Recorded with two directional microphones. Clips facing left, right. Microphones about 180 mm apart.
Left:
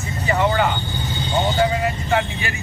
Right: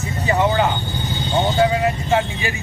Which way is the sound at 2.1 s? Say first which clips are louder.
Right 2 dB; 15° right (ahead or behind).